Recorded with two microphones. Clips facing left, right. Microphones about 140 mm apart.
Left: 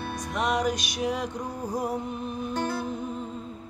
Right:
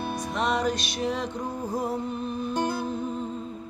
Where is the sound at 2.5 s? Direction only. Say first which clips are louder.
Right 2 dB; 15° right (ahead or behind).